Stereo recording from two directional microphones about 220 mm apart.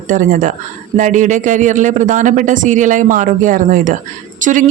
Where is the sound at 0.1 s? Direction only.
35° right (ahead or behind).